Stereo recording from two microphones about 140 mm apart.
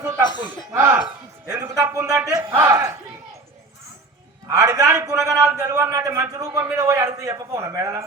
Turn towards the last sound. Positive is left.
turn(degrees=-20)  # may be behind; listen again after turning